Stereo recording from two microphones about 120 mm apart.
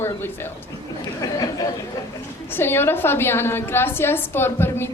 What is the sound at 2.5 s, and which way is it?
A woman's voice, 20° left (ahead or behind).